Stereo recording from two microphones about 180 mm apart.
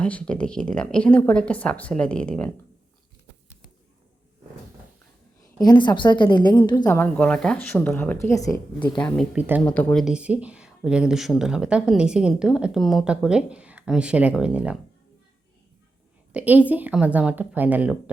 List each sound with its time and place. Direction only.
0.0 s a woman's voice: 5° left (ahead or behind)
5.6 s a woman's voice: 25° left (ahead or behind)
6.8 s a woman's voice: 10° left (ahead or behind)
9.3 s a woman's voice: 5° right (ahead or behind)
16.3 s a woman's voice: 10° right (ahead or behind)